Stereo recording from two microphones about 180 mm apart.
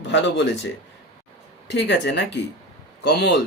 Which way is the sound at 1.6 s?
70° left (ahead or behind).